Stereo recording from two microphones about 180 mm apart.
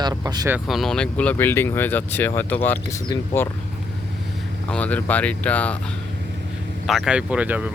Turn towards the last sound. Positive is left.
turn(degrees=-5)  # may be behind; listen again after turning